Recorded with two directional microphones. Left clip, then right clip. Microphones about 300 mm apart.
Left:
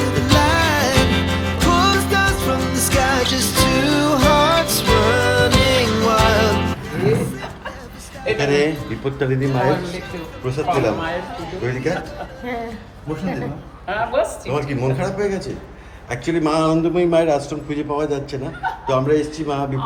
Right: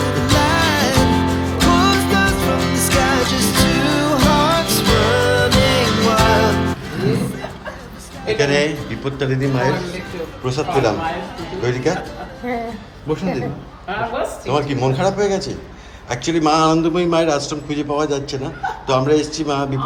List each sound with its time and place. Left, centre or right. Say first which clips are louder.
0.0 s music: even; centre
8.4 s a man's voice: right 2 dB; centre
11.3 s music: right 3 dB; centre
14.2 s speech: left 7 dB; left
14.5 s a man's voice: right 7 dB; centre